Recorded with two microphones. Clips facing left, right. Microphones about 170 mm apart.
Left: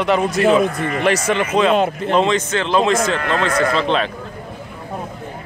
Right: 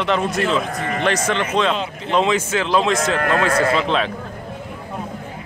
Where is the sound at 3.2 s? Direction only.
50° right (ahead or behind).